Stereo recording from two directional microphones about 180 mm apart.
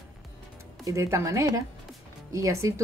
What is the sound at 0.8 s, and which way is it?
Speech, 15° right (ahead or behind).